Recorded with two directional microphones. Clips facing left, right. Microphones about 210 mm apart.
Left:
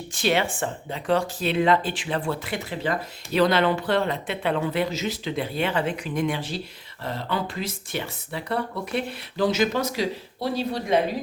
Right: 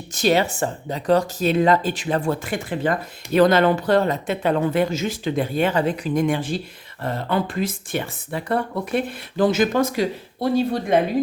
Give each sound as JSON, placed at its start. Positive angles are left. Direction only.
{"t": 0.1, "sound": "speech", "side_deg": -40}